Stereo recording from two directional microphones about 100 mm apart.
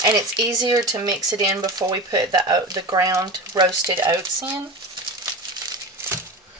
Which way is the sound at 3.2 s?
45° right (ahead or behind).